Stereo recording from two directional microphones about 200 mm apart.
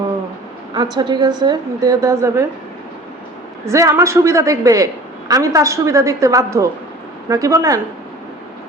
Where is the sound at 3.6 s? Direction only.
15° right (ahead or behind).